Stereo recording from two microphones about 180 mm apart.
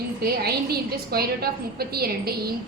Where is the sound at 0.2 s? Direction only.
60° right (ahead or behind).